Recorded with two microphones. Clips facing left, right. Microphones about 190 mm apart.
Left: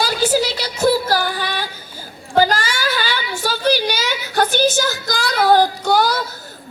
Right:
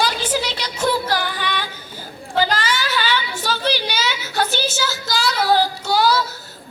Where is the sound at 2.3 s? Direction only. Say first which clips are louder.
Left 5 dB; 45° left (ahead or behind).